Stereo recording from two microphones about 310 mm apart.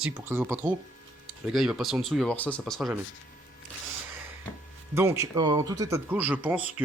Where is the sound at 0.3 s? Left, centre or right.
Centre.